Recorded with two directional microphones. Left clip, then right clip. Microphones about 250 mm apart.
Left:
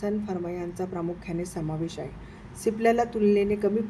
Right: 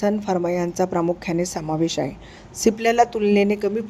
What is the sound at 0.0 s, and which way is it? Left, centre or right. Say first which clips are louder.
Speech: right 9 dB; right.